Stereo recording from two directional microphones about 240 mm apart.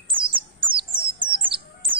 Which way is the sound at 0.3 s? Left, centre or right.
Right.